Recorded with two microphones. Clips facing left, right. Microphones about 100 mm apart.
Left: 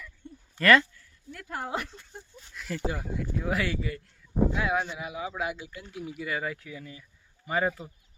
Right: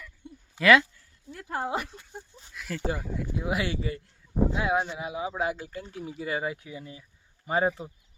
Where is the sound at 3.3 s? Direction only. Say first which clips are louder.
Even; 15° right (ahead or behind).